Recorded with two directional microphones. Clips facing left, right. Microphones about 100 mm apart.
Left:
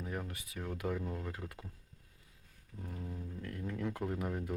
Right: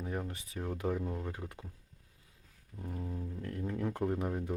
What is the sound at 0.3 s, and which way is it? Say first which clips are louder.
Speech: right 3 dB; 30° right (ahead or behind).